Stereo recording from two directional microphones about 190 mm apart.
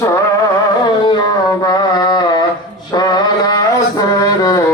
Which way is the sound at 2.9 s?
20° left (ahead or behind).